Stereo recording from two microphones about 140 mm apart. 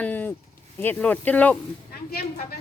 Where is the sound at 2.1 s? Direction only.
90° left.